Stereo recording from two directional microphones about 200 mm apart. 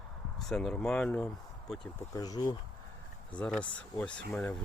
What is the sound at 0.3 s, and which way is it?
Speech, centre (ahead or behind).